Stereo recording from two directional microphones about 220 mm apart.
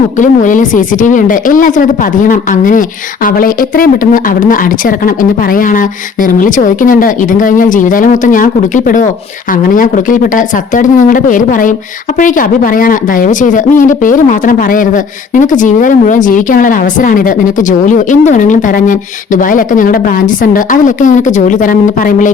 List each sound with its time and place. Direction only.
0.2 s speech: 35° left (ahead or behind)